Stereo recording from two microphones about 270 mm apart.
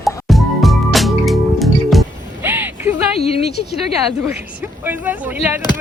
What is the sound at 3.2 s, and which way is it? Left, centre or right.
Speech, left.